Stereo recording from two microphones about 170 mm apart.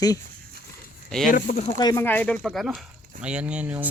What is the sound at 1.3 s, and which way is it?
Speech, 50° left (ahead or behind).